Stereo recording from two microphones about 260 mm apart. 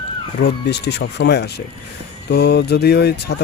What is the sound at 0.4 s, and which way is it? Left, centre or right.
Speech, left.